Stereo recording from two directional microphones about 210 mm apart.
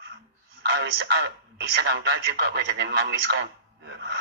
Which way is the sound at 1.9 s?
55° right (ahead or behind).